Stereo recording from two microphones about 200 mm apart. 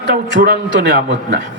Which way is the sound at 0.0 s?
60° right (ahead or behind).